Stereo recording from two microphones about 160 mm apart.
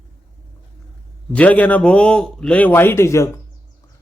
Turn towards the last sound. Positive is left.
turn(degrees=20)  # may be behind; listen again after turning